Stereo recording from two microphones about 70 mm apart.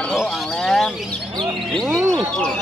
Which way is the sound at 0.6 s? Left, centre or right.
Centre.